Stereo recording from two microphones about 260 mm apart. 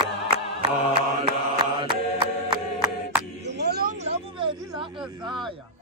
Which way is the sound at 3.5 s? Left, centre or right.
Right.